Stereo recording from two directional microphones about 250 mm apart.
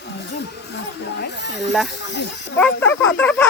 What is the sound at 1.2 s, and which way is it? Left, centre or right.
Speech, left.